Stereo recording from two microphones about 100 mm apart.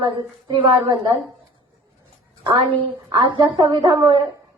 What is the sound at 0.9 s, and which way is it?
Speech, 35° right (ahead or behind).